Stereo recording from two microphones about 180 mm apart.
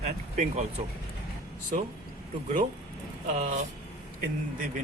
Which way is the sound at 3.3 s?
40° right (ahead or behind).